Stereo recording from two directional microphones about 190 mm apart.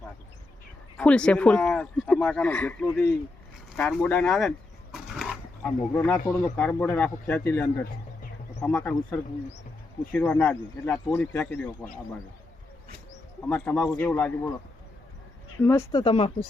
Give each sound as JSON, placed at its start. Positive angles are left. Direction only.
{"t": 0.9, "sound": "speech", "side_deg": 5}
{"t": 3.8, "sound": "dog", "side_deg": 5}
{"t": 5.9, "sound": "speech", "side_deg": 15}
{"t": 13.4, "sound": "speech", "side_deg": 10}
{"t": 15.6, "sound": "speech", "side_deg": 15}